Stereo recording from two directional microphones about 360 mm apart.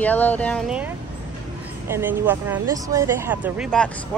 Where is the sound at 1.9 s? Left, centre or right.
Centre.